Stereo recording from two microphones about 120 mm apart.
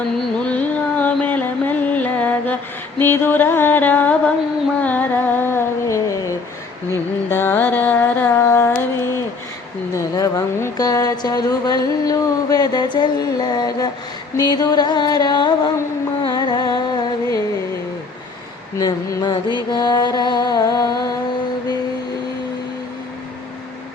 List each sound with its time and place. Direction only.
0.3 s music: 10° left (ahead or behind)
3.0 s mantra: 20° left (ahead or behind)
4.8 s music: 15° left (ahead or behind)
9.9 s speech: 25° left (ahead or behind)
16.2 s music: 35° left (ahead or behind)
18.8 s speech: 35° left (ahead or behind)